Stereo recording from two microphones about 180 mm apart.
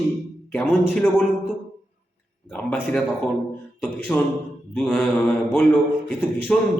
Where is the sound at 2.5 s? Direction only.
5° left (ahead or behind).